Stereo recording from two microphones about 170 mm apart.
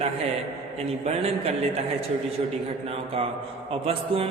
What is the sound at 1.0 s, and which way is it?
Speech, 35° right (ahead or behind).